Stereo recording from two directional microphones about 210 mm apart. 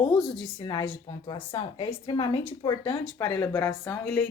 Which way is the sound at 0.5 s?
20° left (ahead or behind).